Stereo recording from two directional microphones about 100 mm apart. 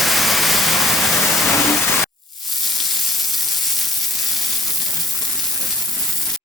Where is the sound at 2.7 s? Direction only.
Centre (ahead or behind).